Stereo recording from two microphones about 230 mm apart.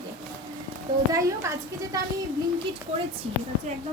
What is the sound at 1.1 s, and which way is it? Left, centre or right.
Speech, centre.